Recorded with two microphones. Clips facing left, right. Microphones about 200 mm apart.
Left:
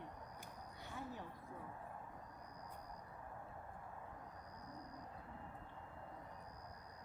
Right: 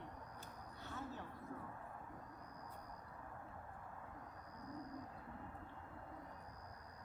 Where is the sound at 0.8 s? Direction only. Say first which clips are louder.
Even; 15° left (ahead or behind).